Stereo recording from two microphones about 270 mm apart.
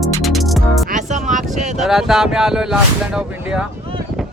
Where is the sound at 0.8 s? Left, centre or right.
Right.